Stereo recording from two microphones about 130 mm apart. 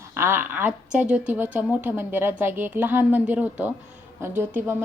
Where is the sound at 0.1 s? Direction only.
20° right (ahead or behind).